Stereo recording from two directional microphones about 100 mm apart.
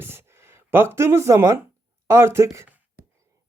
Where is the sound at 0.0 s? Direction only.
25° right (ahead or behind).